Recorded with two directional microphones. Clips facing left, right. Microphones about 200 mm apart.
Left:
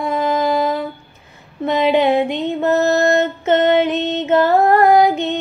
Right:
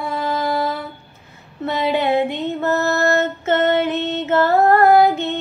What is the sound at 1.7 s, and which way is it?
Music, 15° left (ahead or behind).